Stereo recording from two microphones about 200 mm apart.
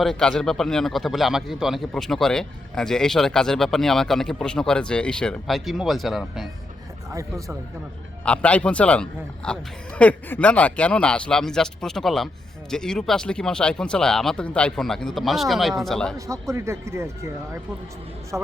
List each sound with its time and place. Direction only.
0.0 s a man's voice: 5° left (ahead or behind)
7.1 s speech: 15° right (ahead or behind)
8.2 s a man's voice: 5° left (ahead or behind)
16.1 s speech: 15° right (ahead or behind)